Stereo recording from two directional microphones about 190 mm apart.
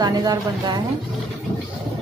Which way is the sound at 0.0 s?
20° right (ahead or behind).